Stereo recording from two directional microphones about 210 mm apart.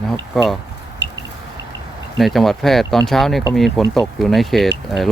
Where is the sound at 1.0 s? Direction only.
55° right (ahead or behind).